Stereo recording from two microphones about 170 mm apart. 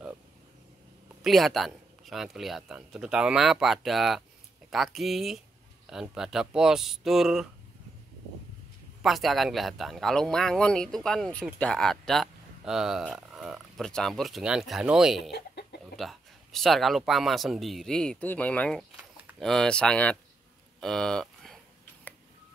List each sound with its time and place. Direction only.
1.2 s speech: centre (ahead or behind)
9.0 s speech: centre (ahead or behind)
15.3 s chicken: 75° left (ahead or behind)
16.0 s speech: centre (ahead or behind)